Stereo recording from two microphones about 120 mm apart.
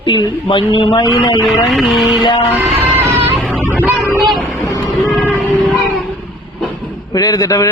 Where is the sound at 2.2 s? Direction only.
40° left (ahead or behind).